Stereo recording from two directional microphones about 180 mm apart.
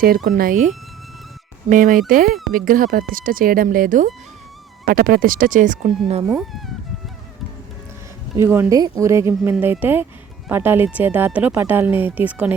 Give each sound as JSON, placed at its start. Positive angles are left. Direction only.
{"t": 0.3, "sound": "speech", "side_deg": -50}
{"t": 1.7, "sound": "speech", "side_deg": -50}
{"t": 8.4, "sound": "speech", "side_deg": -15}